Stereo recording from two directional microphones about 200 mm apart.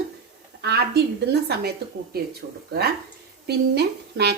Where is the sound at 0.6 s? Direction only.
55° right (ahead or behind).